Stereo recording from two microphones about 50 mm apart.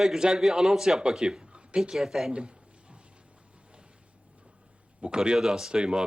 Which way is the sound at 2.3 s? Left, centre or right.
Right.